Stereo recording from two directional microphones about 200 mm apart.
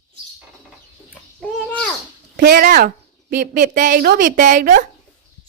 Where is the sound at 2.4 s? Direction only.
45° right (ahead or behind).